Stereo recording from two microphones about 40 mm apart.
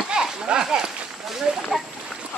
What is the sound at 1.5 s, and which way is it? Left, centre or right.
Speech, centre.